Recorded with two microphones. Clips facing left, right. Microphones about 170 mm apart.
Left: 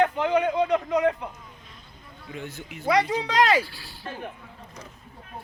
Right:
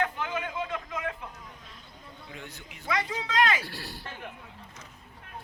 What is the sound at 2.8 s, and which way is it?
Speech, 35° left (ahead or behind).